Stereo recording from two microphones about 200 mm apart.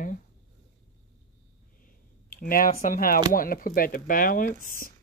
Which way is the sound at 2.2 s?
45° left (ahead or behind).